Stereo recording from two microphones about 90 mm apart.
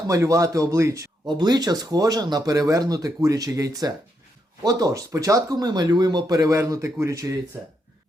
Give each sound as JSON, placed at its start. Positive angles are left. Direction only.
{"t": 0.1, "sound": "a man's voice", "side_deg": -40}
{"t": 1.3, "sound": "speech", "side_deg": -55}
{"t": 6.6, "sound": "a man's voice", "side_deg": -35}